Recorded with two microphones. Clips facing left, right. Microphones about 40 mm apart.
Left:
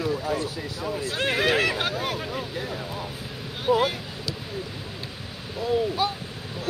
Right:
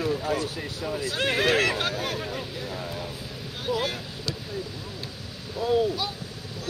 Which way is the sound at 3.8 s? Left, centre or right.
Centre.